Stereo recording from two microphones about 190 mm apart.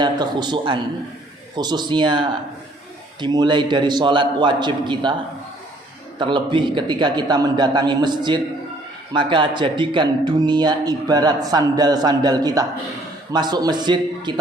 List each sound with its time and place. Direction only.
0.0 s speech: 20° right (ahead or behind)
6.1 s speech: 25° right (ahead or behind)